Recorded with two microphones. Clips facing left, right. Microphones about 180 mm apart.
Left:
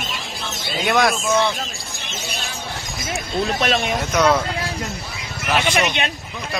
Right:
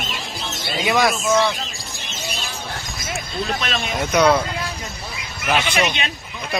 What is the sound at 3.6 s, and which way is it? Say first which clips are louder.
Speech: left 6 dB; 55° left (ahead or behind).